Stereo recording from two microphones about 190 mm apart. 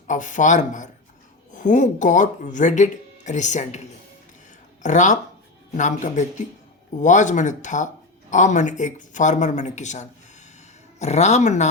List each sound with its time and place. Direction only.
0.1 s speech: 40° left (ahead or behind)